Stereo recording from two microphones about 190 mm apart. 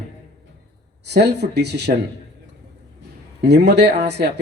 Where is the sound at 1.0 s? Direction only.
60° right (ahead or behind).